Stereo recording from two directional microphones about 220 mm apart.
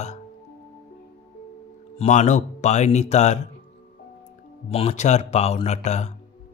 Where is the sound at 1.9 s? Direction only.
30° left (ahead or behind).